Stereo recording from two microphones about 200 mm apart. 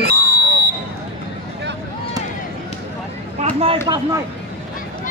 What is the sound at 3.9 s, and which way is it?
Speech, 20° right (ahead or behind).